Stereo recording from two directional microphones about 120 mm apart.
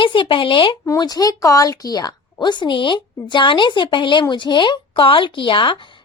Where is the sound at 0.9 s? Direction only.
30° left (ahead or behind).